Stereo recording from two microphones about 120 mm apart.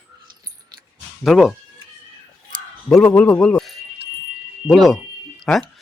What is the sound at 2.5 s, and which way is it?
Speech, 5° left (ahead or behind).